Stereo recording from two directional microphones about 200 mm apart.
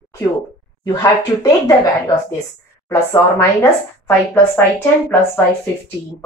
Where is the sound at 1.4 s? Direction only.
20° left (ahead or behind).